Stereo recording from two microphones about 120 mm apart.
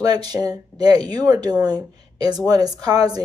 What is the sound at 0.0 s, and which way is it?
Speech, 35° right (ahead or behind).